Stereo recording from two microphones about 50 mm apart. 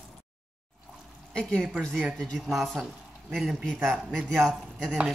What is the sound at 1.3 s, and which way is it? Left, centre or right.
Speech, centre.